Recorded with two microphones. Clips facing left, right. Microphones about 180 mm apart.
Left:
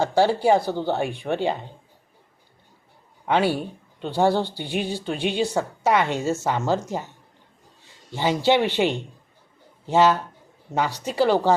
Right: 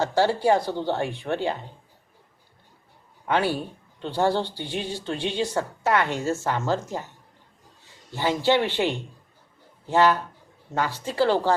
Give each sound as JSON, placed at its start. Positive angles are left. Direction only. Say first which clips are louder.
{"t": 0.0, "sound": "speech", "louder": "left 2 dB", "side_deg": 10}
{"t": 3.2, "sound": "speech", "louder": "left 3 dB", "side_deg": 15}
{"t": 8.1, "sound": "speech", "louder": "left 2 dB", "side_deg": 15}